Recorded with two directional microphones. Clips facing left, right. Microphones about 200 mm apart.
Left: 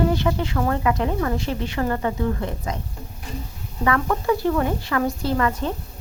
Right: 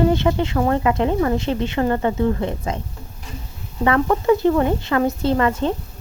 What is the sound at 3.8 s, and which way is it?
Speech, 25° right (ahead or behind).